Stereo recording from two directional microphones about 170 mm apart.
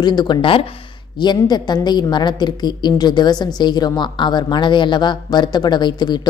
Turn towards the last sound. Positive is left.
turn(degrees=25)  # may be behind; listen again after turning